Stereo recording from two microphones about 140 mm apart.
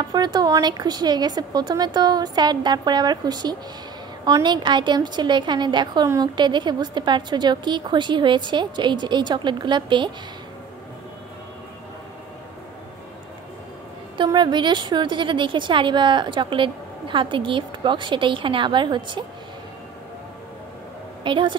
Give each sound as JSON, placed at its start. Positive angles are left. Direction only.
{"t": 0.1, "sound": "a woman's voice", "side_deg": -30}
{"t": 14.1, "sound": "a woman's voice", "side_deg": -35}
{"t": 21.2, "sound": "speech", "side_deg": -35}